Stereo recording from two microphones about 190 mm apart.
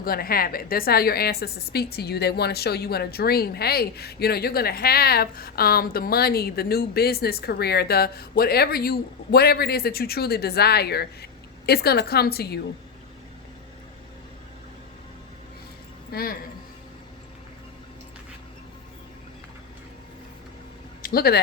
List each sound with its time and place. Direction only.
0.0 s a woman's voice: 50° left (ahead or behind)
16.1 s speech: 50° left (ahead or behind)
21.0 s speech: 50° left (ahead or behind)